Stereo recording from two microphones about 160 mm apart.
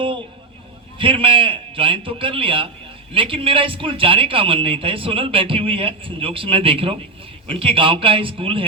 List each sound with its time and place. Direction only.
0.9 s a man's voice: 35° right (ahead or behind)